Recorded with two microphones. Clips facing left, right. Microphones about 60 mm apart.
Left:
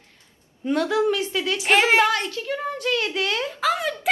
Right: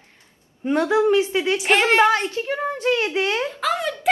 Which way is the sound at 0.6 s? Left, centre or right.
Right.